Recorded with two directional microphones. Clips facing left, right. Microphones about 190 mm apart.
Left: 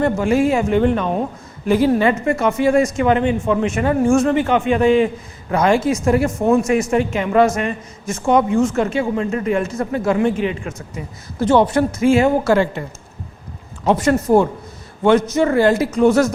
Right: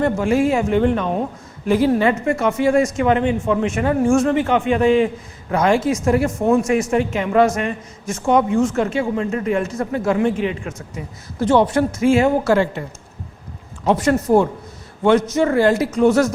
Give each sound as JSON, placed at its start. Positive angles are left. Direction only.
{"t": 0.0, "sound": "a man's voice", "side_deg": 15}
{"t": 14.3, "sound": "speech", "side_deg": 45}
{"t": 15.0, "sound": "a man's voice", "side_deg": 15}